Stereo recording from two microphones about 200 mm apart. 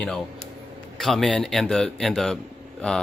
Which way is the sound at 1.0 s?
Centre (ahead or behind).